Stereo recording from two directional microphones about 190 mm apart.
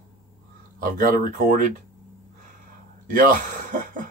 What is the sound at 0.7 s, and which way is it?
Speech, 45° right (ahead or behind).